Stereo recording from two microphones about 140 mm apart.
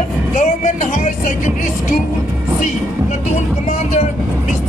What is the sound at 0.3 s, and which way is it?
Speech, 60° left (ahead or behind).